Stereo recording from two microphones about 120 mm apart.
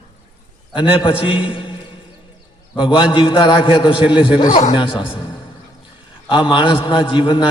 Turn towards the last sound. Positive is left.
turn(degrees=45)  # may be behind; listen again after turning